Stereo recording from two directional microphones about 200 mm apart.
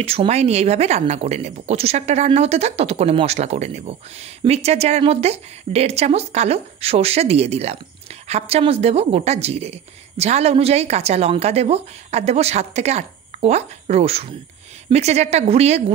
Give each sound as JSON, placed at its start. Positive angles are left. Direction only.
{"t": 0.0, "sound": "a woman's voice", "side_deg": -30}